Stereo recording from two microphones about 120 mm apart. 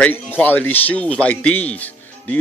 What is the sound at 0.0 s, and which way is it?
Speech, 15° left (ahead or behind).